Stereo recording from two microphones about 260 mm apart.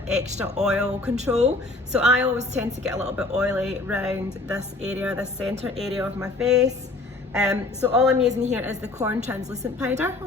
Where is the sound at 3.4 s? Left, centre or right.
Centre.